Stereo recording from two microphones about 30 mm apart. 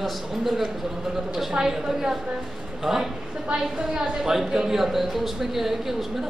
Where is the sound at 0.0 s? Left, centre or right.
Centre.